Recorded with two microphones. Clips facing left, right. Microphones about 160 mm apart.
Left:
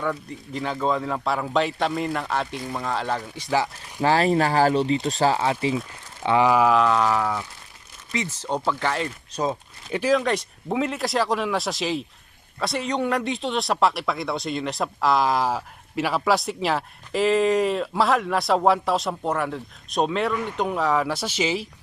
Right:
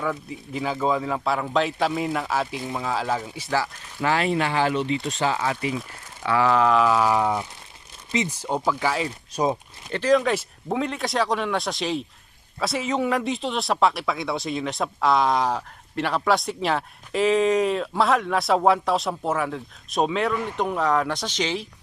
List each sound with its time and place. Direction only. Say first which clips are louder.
0.0 s speech: even; 5° right (ahead or behind)
3.5 s speech: left 2 dB; 15° left (ahead or behind)
4.0 s speech: left 3 dB; 35° left (ahead or behind); by 9.6 s 15° right (ahead or behind)
9.9 s speech: right 1 dB; 5° left (ahead or behind)